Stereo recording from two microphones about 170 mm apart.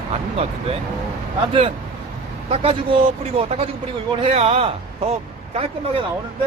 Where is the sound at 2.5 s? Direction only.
35° right (ahead or behind).